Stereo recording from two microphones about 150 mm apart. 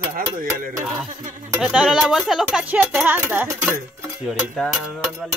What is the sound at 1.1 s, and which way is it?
Music, 55° right (ahead or behind).